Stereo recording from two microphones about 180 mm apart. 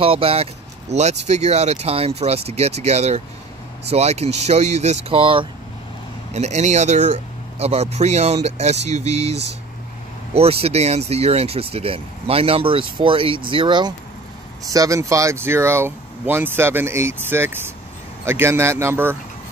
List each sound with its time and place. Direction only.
0.0 s speech: 30° right (ahead or behind); by 19.1 s 15° right (ahead or behind)